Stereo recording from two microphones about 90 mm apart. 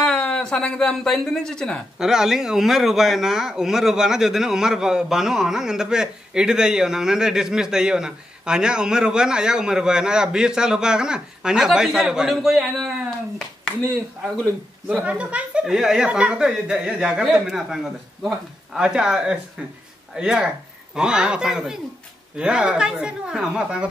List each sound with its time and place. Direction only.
0.0 s speech: 10° left (ahead or behind)
2.0 s speech: 5° right (ahead or behind)
13.7 s a sound: 10° left (ahead or behind)
14.4 s speech: 15° right (ahead or behind)